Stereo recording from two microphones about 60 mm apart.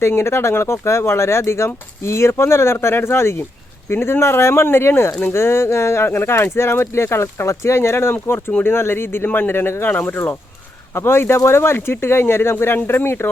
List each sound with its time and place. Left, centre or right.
0.0 s speech: left
9.9 s speech: left
10.9 s speech: left